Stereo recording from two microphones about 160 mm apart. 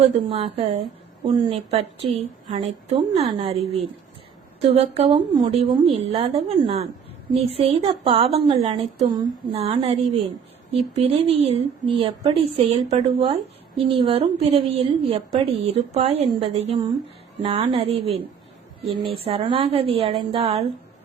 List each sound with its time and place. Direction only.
0.0 s speech: 40° right (ahead or behind)
18.9 s speech: 35° right (ahead or behind)